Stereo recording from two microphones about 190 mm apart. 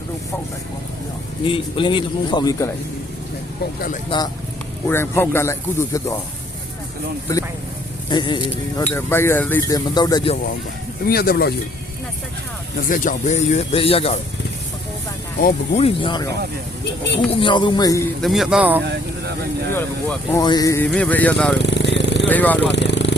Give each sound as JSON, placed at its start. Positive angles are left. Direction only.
{"t": 1.5, "sound": "speech", "side_deg": 25}
{"t": 4.1, "sound": "speech", "side_deg": 25}
{"t": 4.9, "sound": "speech", "side_deg": 10}
{"t": 8.1, "sound": "speech", "side_deg": 25}
{"t": 11.0, "sound": "speech", "side_deg": 50}
{"t": 12.9, "sound": "speech", "side_deg": 45}
{"t": 15.4, "sound": "speech", "side_deg": 45}
{"t": 15.8, "sound": "speech", "side_deg": 30}
{"t": 17.4, "sound": "speech", "side_deg": 25}
{"t": 18.2, "sound": "speech", "side_deg": 0}
{"t": 19.7, "sound": "speech", "side_deg": 15}
{"t": 21.6, "sound": "a sound", "side_deg": 65}
{"t": 22.3, "sound": "speech", "side_deg": 10}
{"t": 22.7, "sound": "a sound", "side_deg": 65}